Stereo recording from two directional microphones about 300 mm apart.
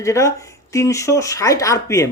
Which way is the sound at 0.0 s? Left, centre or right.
Centre.